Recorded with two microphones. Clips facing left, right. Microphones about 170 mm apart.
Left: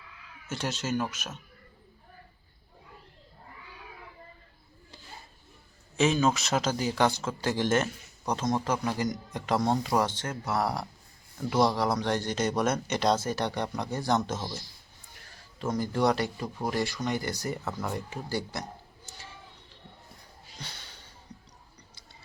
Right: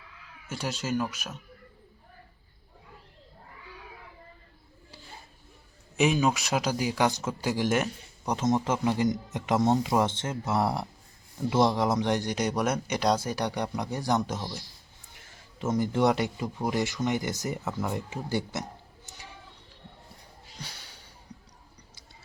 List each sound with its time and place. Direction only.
0.4 s speech: 10° right (ahead or behind)
6.0 s speech: 15° right (ahead or behind)
17.7 s speech: 10° right (ahead or behind)
17.9 s speech: 20° right (ahead or behind)
19.0 s a sound: 20° right (ahead or behind)
20.6 s a sound: 10° right (ahead or behind)